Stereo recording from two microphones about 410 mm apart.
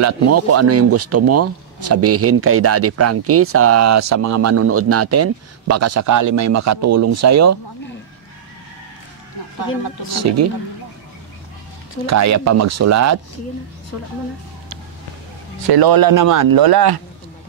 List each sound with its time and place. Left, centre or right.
0.0 s speech: right
10.1 s speech: right
12.1 s speech: right
15.7 s speech: right